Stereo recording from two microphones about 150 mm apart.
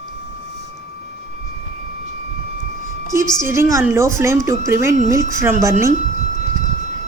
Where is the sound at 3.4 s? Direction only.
20° right (ahead or behind).